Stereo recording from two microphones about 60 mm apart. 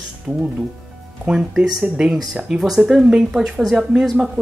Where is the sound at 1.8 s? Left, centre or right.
Centre.